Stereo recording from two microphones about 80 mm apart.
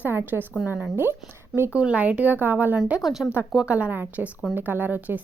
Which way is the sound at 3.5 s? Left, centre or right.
Centre.